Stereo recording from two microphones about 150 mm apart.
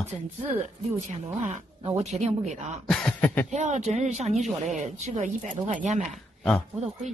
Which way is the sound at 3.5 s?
50° right (ahead or behind).